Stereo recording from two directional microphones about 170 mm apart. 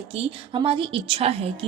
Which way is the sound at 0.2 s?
30° right (ahead or behind).